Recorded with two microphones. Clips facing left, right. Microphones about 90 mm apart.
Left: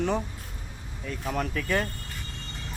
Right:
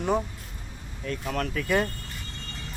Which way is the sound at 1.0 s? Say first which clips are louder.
Right 1 dB; 5° left (ahead or behind).